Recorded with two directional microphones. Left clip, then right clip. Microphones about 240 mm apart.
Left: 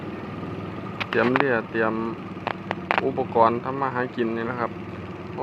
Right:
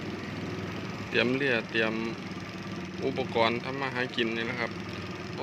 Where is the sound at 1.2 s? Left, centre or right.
Centre.